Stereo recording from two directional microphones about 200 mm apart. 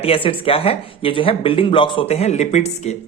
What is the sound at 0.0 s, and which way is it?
Speech, 25° left (ahead or behind).